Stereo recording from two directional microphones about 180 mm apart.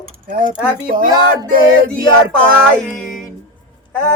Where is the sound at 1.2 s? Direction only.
55° right (ahead or behind).